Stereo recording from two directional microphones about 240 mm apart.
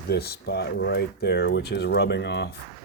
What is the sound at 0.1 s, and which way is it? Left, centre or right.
Speech, left.